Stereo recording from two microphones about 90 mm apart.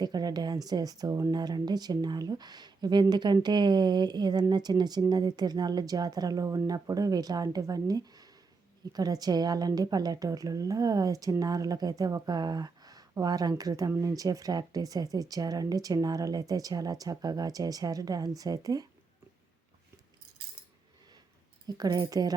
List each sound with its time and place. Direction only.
0.0 s speech: 45° right (ahead or behind)
1.3 s speech: 50° right (ahead or behind)
21.7 s speech: 45° right (ahead or behind)